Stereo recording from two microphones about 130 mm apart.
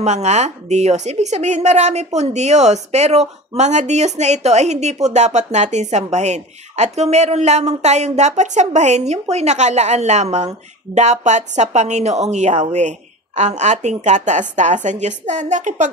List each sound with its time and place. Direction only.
0.0 s a woman's voice: 60° right (ahead or behind)